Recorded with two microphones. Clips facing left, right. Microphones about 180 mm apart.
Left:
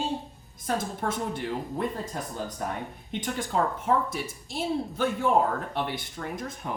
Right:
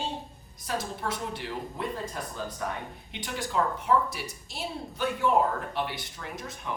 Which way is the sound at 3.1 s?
45° left (ahead or behind).